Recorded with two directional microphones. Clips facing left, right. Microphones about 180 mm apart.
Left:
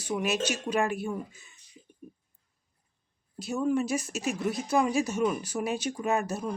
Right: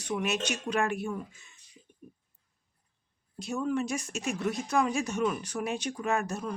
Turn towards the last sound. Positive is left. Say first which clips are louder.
# left 2 dB
turn(degrees=5)  # may be behind; listen again after turning